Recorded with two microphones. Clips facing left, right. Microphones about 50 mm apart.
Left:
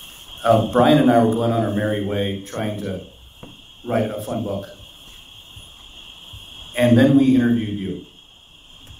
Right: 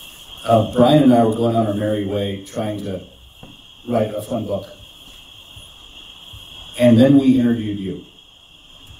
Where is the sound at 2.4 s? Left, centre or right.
Left.